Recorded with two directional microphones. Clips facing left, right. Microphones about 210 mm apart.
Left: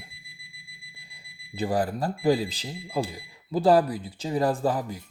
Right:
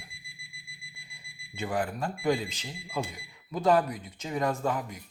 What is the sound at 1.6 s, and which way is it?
Speech, 35° left (ahead or behind).